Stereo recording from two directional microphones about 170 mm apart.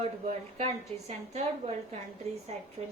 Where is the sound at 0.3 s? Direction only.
40° right (ahead or behind).